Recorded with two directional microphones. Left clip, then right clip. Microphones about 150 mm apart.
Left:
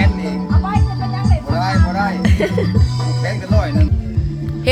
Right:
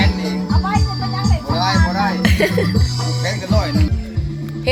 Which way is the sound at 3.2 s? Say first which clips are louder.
Even; 20° right (ahead or behind).